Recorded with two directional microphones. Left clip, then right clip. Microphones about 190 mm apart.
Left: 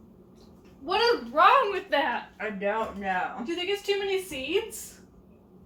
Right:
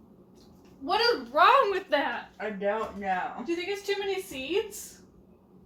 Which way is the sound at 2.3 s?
15° right (ahead or behind).